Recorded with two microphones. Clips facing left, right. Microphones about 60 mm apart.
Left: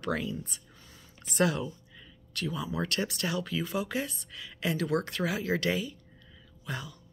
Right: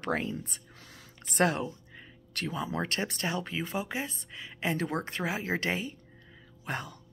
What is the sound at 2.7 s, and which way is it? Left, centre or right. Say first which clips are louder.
Speech: even; right.